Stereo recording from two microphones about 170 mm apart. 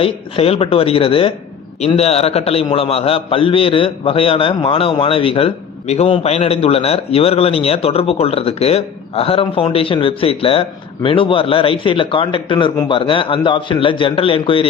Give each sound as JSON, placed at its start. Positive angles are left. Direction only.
{"t": 0.0, "sound": "a man's voice", "side_deg": 35}